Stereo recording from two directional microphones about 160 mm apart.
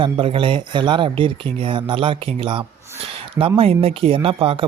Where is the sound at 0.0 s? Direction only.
35° right (ahead or behind).